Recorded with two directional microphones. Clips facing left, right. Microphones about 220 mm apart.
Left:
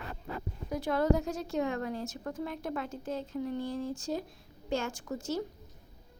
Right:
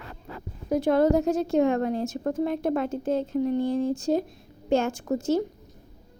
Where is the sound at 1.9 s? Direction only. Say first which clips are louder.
Right 9 dB; 25° right (ahead or behind).